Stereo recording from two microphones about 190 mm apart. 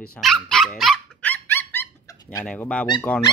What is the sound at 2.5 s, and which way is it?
Speech, 5° left (ahead or behind).